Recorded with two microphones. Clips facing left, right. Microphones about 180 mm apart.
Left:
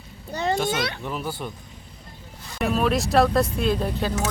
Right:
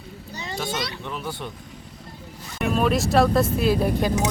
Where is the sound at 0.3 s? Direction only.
55° left (ahead or behind).